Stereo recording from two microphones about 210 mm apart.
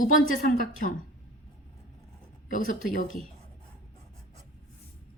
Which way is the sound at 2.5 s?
40° left (ahead or behind).